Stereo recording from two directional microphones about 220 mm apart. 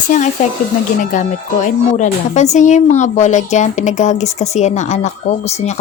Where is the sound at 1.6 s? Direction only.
35° left (ahead or behind).